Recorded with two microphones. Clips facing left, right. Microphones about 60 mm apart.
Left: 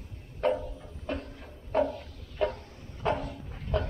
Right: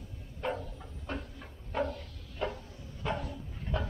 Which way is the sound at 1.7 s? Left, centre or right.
Left.